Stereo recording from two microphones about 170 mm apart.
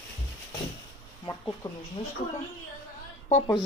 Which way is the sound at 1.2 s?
15° left (ahead or behind).